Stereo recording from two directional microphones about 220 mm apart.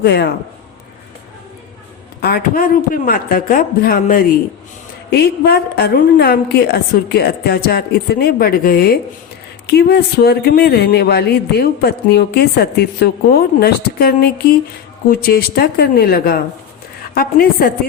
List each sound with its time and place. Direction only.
0.0 s speech: 50° left (ahead or behind)
2.2 s a man's voice: 40° left (ahead or behind)